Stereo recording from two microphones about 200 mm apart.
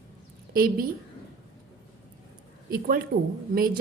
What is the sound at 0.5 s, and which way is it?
Speech, 45° right (ahead or behind).